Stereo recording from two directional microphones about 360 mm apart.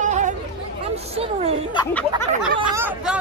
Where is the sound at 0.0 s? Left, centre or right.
Centre.